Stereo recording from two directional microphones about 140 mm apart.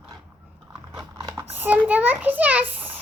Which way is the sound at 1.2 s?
30° right (ahead or behind).